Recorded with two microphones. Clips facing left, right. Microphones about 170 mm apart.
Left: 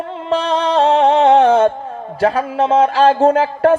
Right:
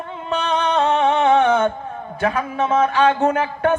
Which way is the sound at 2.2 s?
30° left (ahead or behind).